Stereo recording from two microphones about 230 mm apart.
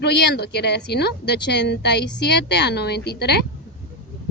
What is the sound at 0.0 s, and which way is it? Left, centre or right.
Speech, left.